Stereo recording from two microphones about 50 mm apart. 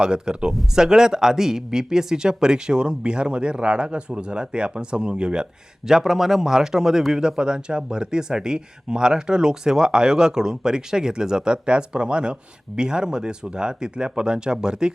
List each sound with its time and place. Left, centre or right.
0.0 s a man's voice: centre